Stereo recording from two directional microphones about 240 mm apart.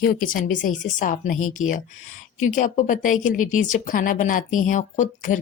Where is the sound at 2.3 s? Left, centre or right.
Left.